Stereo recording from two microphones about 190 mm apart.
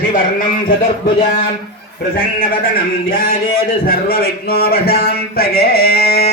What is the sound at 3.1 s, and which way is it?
A man's voice, 50° left (ahead or behind).